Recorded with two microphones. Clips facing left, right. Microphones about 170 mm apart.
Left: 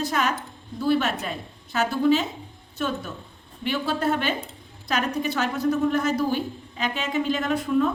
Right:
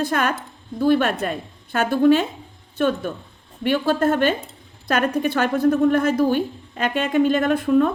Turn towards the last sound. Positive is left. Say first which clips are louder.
# right 5 dB
turn(degrees=-50)  # may be behind; listen again after turning